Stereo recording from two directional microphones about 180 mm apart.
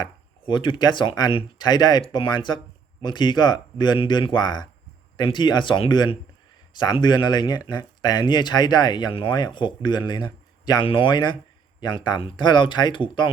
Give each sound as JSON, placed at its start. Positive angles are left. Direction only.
{"t": 0.0, "sound": "speech", "side_deg": 25}